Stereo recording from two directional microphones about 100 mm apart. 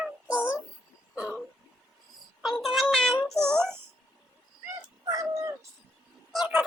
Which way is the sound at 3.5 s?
10° left (ahead or behind).